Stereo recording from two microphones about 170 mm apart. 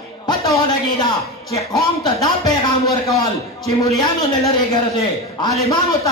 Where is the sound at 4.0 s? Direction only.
25° left (ahead or behind).